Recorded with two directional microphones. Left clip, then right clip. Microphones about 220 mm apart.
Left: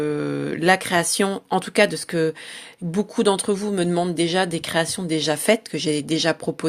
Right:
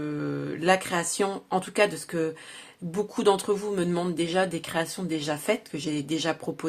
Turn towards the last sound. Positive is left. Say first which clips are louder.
# left 7 dB
turn(degrees=30)  # may be behind; listen again after turning